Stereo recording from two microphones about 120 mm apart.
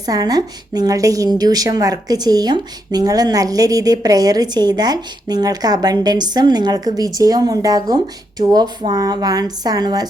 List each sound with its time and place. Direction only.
0.0 s a woman's voice: 30° right (ahead or behind)